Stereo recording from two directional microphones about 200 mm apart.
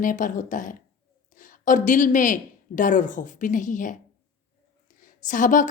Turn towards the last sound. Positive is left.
turn(degrees=40)  # may be behind; listen again after turning